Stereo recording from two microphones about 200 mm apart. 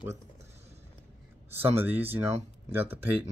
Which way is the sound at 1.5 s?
10° right (ahead or behind).